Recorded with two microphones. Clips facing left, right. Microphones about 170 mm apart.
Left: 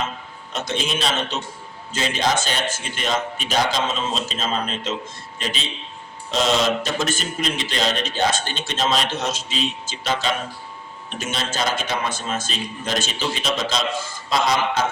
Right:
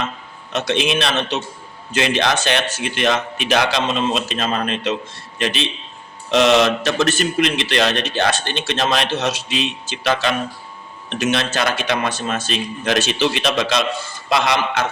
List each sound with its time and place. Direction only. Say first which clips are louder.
0.5 s a man's voice: right 6 dB; 70° right (ahead or behind)
6.3 s a man's voice: right 6 dB; 70° right (ahead or behind)